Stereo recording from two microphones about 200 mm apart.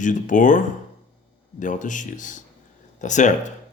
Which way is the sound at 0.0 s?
40° left (ahead or behind).